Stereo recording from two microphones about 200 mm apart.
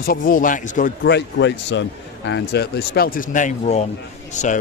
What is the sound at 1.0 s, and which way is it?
A man's voice, 60° left (ahead or behind).